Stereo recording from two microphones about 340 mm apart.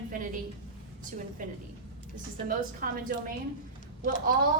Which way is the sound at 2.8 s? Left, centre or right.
Right.